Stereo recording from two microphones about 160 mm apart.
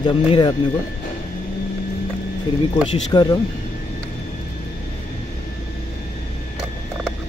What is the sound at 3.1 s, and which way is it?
Speech, 25° left (ahead or behind).